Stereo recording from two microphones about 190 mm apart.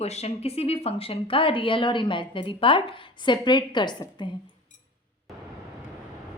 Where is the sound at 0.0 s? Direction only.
35° left (ahead or behind).